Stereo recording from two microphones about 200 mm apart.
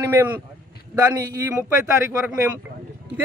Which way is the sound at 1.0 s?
15° right (ahead or behind).